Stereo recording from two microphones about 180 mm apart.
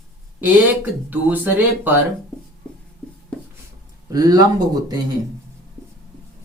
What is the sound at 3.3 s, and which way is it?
Writing, 5° left (ahead or behind).